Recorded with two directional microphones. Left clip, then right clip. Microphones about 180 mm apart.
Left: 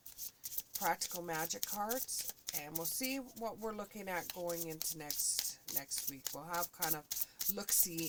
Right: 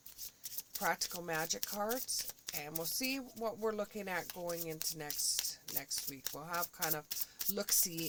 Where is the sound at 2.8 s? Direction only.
40° right (ahead or behind).